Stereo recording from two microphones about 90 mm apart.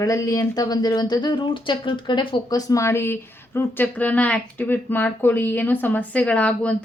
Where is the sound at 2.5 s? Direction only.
45° left (ahead or behind); by 6.7 s 15° left (ahead or behind).